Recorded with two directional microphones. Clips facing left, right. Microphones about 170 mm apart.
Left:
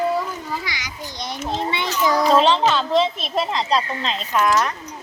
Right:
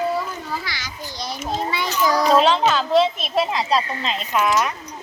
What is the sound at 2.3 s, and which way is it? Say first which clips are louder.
A woman's voice: even; 5° right (ahead or behind).